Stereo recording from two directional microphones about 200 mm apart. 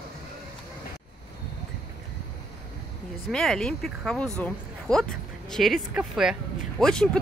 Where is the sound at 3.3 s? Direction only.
5° left (ahead or behind).